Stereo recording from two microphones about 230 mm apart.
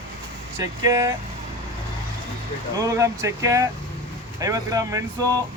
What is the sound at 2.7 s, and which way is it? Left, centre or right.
Speech, centre.